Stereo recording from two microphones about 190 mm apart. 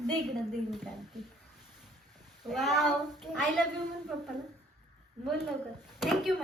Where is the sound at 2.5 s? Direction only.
Centre (ahead or behind).